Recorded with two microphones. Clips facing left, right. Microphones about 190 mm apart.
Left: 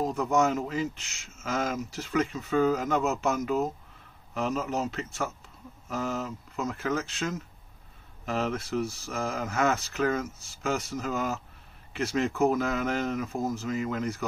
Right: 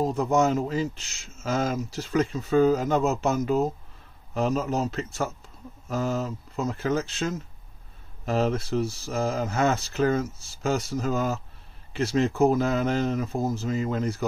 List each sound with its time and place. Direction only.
0.0 s speech: 30° right (ahead or behind)